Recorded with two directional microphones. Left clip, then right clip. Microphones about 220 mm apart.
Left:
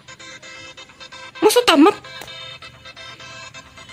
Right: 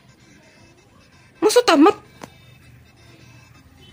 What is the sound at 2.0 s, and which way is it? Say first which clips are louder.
Music: left 10 dB; 40° left (ahead or behind).